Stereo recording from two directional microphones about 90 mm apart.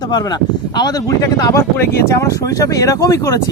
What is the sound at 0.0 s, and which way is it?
Speech, 50° left (ahead or behind).